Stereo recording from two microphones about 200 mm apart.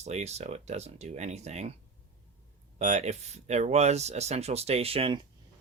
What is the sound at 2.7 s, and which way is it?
Speech, 35° right (ahead or behind).